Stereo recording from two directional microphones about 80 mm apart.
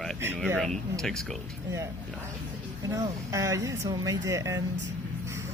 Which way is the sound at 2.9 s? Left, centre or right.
Right.